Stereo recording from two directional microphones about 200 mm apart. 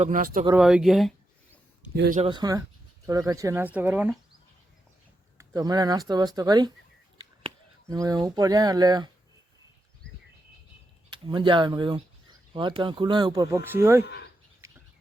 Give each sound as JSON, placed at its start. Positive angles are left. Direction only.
{"t": 0.0, "sound": "speech", "side_deg": -40}
{"t": 0.5, "sound": "speech", "side_deg": -5}
{"t": 2.1, "sound": "speech", "side_deg": -25}
{"t": 5.4, "sound": "speech", "side_deg": -20}
{"t": 11.1, "sound": "speech", "side_deg": -25}
{"t": 14.0, "sound": "speech", "side_deg": 55}
{"t": 14.6, "sound": "bird", "side_deg": -15}